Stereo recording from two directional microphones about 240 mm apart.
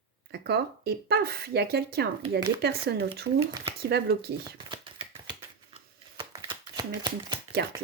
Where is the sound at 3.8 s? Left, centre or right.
Right.